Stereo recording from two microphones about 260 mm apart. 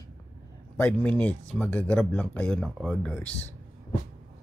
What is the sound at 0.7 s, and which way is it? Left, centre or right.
Speech, centre.